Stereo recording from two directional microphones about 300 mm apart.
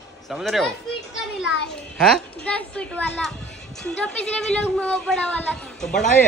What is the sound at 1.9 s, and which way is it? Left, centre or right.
Speech, centre.